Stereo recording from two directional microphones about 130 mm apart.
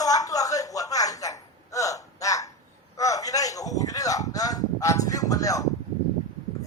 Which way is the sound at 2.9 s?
25° left (ahead or behind).